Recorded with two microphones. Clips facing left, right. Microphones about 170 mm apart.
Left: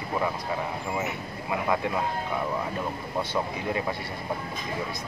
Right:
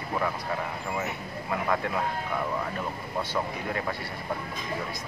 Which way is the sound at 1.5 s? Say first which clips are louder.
Left 2 dB; 15° left (ahead or behind).